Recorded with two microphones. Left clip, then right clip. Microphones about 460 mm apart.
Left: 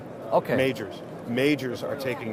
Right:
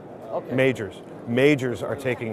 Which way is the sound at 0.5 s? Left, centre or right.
Right.